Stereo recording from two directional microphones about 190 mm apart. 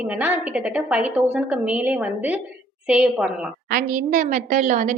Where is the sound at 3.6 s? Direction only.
50° right (ahead or behind).